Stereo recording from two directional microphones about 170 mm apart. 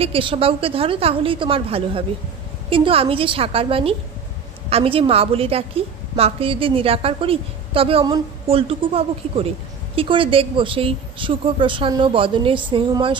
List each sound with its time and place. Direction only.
0.0 s a woman's voice: 30° right (ahead or behind)